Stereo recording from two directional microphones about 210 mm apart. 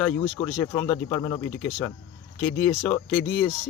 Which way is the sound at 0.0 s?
15° left (ahead or behind).